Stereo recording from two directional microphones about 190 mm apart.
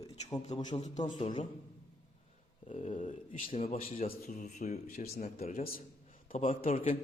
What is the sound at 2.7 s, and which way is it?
A man's voice, 35° left (ahead or behind).